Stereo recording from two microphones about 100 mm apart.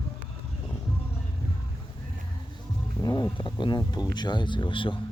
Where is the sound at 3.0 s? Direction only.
45° left (ahead or behind).